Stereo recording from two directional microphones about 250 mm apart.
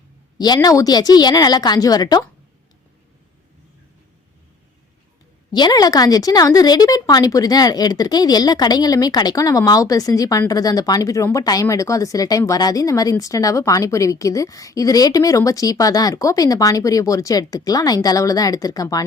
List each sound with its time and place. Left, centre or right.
0.3 s speech: centre
5.5 s speech: centre